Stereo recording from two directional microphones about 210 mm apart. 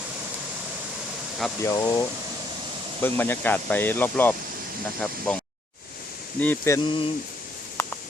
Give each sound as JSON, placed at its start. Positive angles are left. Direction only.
{"t": 1.6, "sound": "speech", "side_deg": 15}
{"t": 6.4, "sound": "speech", "side_deg": 10}